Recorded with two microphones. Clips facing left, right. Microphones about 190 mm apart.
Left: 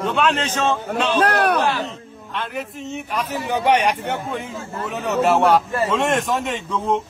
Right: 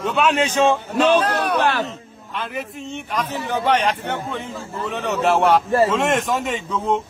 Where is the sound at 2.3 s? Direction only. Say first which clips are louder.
Even; centre (ahead or behind).